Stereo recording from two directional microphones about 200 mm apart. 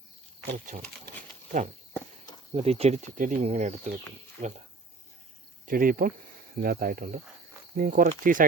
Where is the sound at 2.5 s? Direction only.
30° right (ahead or behind).